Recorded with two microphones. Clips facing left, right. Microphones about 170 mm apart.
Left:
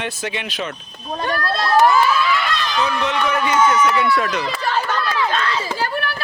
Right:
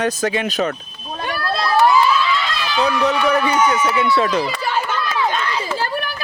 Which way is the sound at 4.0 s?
25° right (ahead or behind).